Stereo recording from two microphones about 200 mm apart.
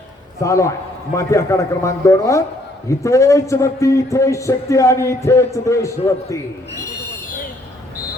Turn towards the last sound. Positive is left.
turn(degrees=15)  # may be behind; listen again after turning